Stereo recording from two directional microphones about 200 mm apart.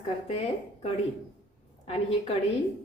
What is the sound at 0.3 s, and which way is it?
A woman's voice, 30° left (ahead or behind).